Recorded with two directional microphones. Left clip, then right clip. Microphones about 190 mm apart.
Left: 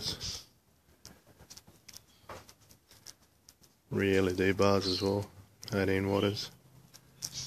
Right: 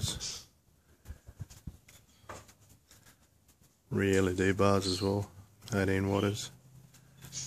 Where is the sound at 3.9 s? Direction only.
5° right (ahead or behind).